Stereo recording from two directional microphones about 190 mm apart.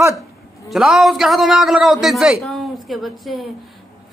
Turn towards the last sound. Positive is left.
turn(degrees=0)  # may be behind; listen again after turning